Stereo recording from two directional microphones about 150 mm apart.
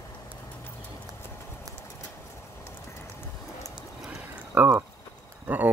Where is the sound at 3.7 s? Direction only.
5° right (ahead or behind).